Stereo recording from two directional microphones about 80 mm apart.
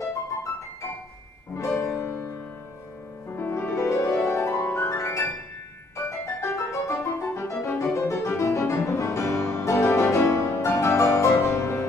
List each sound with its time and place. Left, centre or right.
1.6 s music: left
3.3 s music: left
3.9 s music: left